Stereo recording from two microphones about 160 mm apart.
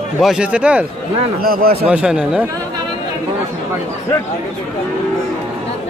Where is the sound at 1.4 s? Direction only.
70° right (ahead or behind).